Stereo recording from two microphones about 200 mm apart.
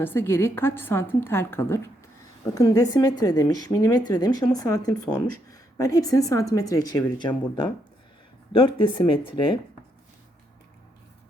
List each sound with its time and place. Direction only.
0.0 s a woman's voice: 10° left (ahead or behind)
9.0 s speech: 25° left (ahead or behind)